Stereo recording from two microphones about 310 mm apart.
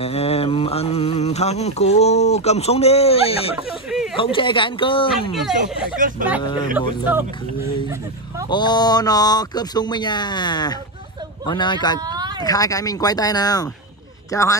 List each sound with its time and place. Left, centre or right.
0.0 s mantra: centre
3.9 s a sound: centre
4.2 s speech: centre
5.3 s speech: centre
5.9 s speech: right
6.8 s speech: centre
8.5 s speech: centre
12.0 s a sound: centre
12.4 s speech: centre